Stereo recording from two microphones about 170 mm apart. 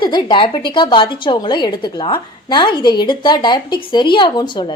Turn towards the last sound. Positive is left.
turn(degrees=25)  # may be behind; listen again after turning